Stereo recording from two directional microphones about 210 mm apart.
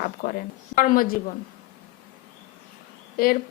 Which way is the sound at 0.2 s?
40° left (ahead or behind).